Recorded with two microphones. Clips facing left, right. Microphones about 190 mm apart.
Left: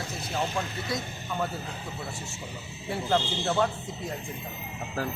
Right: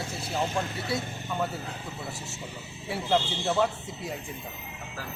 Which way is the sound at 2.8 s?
5° right (ahead or behind).